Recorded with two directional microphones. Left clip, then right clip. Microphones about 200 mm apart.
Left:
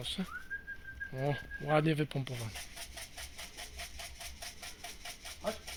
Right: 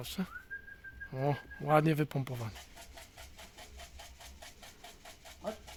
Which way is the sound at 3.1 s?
20° left (ahead or behind).